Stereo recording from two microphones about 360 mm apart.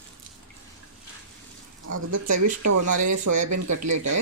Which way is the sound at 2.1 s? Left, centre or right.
Right.